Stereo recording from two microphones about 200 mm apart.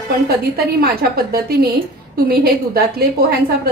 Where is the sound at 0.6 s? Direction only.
50° right (ahead or behind).